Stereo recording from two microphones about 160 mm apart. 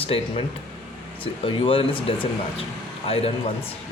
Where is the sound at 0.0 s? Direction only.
35° left (ahead or behind).